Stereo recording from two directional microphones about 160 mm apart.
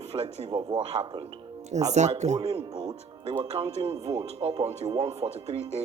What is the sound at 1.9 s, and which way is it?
Speech, 45° right (ahead or behind).